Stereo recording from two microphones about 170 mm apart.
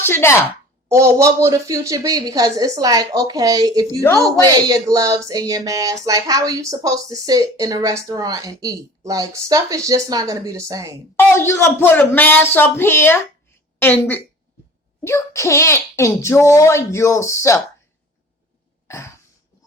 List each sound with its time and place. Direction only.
0.0 s speech: 15° left (ahead or behind)
0.9 s speech: 15° right (ahead or behind)
11.2 s a child's voice: 15° left (ahead or behind)
18.9 s throat clearing: 15° left (ahead or behind)